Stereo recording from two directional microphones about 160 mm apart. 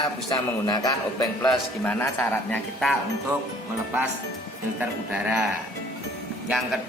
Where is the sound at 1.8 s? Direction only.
10° left (ahead or behind).